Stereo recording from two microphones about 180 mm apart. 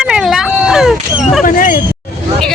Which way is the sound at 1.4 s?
50° left (ahead or behind).